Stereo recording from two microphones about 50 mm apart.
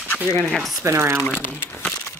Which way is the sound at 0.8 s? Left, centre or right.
Right.